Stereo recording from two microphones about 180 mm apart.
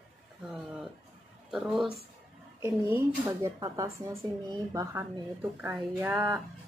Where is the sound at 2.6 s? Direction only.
15° right (ahead or behind).